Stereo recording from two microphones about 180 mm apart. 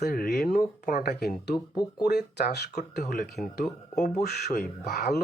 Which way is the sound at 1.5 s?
25° left (ahead or behind).